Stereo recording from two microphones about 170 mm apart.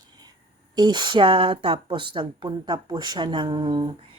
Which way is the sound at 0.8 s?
25° right (ahead or behind).